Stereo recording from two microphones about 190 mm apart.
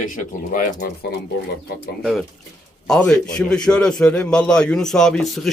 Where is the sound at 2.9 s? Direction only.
5° left (ahead or behind).